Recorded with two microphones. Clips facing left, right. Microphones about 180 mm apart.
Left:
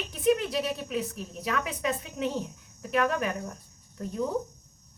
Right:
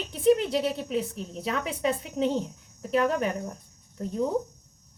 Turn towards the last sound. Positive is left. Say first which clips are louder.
# right 3 dB
turn(degrees=-25)  # may be behind; listen again after turning